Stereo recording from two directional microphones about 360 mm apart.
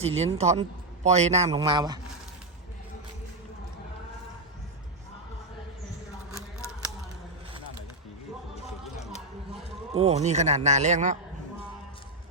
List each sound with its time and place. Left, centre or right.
0.0 s speech: centre
9.9 s a man's voice: centre